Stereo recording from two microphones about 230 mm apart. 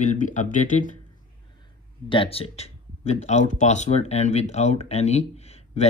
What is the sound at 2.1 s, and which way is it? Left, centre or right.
Speech, left.